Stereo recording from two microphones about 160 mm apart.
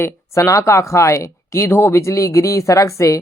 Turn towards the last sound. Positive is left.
turn(degrees=20)  # may be behind; listen again after turning